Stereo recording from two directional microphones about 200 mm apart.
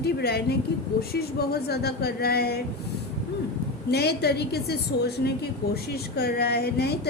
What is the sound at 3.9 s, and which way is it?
A woman's voice, 55° left (ahead or behind).